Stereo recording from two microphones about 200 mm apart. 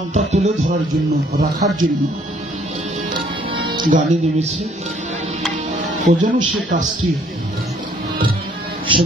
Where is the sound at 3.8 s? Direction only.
40° right (ahead or behind).